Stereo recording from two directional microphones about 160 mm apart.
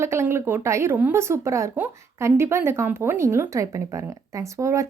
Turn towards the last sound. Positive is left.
turn(degrees=-20)  # may be behind; listen again after turning